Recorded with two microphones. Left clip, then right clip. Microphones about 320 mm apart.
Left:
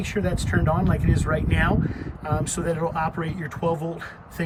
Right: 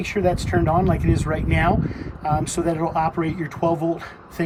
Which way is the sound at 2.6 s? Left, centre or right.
Left.